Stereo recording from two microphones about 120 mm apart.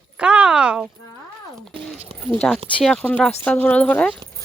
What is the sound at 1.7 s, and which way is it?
Horse, 45° right (ahead or behind).